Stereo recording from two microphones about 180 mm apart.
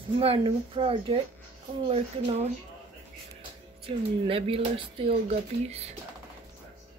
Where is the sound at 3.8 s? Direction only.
30° right (ahead or behind).